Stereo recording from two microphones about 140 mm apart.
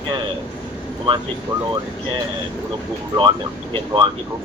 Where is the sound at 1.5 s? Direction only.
20° right (ahead or behind).